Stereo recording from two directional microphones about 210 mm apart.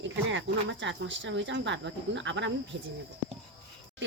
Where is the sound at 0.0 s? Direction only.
60° right (ahead or behind).